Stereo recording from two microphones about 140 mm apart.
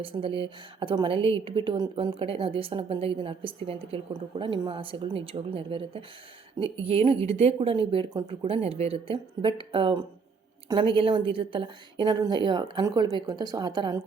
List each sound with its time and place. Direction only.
0.0 s a woman's voice: 40° right (ahead or behind)